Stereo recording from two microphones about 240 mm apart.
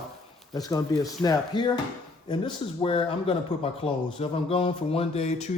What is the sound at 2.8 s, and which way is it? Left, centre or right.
Speech, left.